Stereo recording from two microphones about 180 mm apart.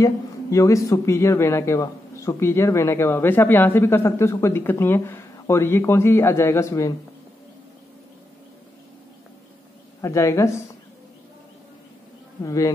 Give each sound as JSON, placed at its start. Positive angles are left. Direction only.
{"t": 0.0, "sound": "speech", "side_deg": 15}
{"t": 10.0, "sound": "speech", "side_deg": 15}
{"t": 12.4, "sound": "speech", "side_deg": 20}